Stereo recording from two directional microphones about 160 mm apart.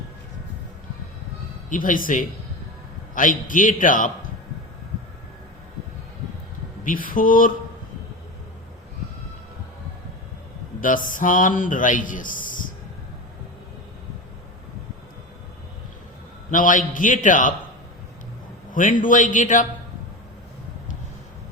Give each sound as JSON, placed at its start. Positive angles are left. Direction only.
{"t": 1.7, "sound": "a man's voice", "side_deg": 55}
{"t": 6.8, "sound": "a man's voice", "side_deg": 60}
{"t": 10.8, "sound": "speech", "side_deg": 55}
{"t": 16.5, "sound": "a man's voice", "side_deg": 55}
{"t": 18.7, "sound": "a man's voice", "side_deg": 55}